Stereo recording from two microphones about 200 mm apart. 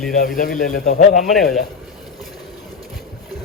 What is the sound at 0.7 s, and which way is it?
Speech, 45° left (ahead or behind).